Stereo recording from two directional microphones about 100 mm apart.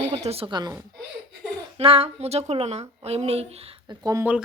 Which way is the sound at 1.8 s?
75° right (ahead or behind).